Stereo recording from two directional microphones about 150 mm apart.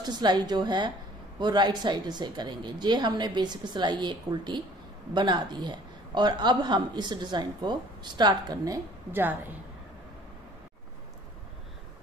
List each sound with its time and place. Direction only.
0.0 s a woman's voice: 30° right (ahead or behind); by 9.4 s 15° right (ahead or behind)